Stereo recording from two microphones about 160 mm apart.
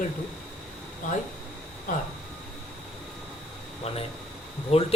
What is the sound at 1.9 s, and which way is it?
Speech, 55° left (ahead or behind).